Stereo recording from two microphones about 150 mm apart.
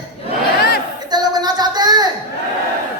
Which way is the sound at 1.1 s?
25° right (ahead or behind).